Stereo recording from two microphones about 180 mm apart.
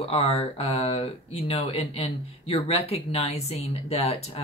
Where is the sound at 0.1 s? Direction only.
35° left (ahead or behind).